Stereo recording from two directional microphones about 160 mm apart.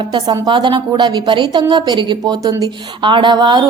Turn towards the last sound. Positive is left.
turn(degrees=-30)  # may be behind; listen again after turning